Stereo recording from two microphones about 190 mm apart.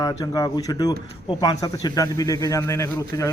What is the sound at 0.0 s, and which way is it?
Speech, 20° left (ahead or behind).